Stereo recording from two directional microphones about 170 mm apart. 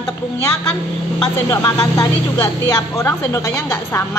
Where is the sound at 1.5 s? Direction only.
20° left (ahead or behind).